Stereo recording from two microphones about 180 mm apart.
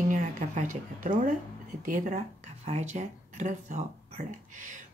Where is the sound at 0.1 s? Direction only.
45° right (ahead or behind).